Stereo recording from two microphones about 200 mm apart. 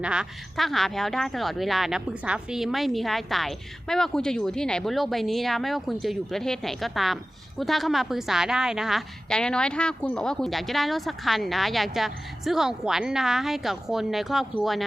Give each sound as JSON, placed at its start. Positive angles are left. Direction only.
{"t": 0.0, "sound": "a woman's voice", "side_deg": -5}